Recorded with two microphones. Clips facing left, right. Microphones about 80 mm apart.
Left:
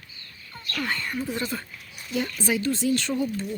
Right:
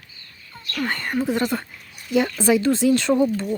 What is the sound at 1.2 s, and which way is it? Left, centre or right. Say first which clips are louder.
Speech: right 7 dB; right.